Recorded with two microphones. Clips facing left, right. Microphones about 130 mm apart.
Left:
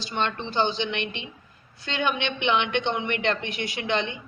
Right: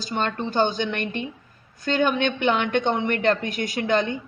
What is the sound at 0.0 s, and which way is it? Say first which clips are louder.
A woman's voice: right 2 dB; 40° right (ahead or behind).